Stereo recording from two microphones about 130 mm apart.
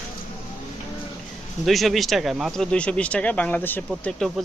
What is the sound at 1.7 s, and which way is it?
Speech, centre (ahead or behind).